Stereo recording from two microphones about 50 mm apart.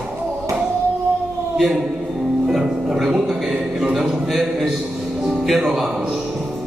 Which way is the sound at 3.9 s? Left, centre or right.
Centre.